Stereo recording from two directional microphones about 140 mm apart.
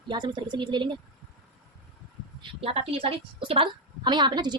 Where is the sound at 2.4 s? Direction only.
45° right (ahead or behind).